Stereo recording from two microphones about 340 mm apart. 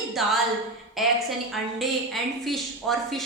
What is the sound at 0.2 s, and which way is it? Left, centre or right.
Speech, centre.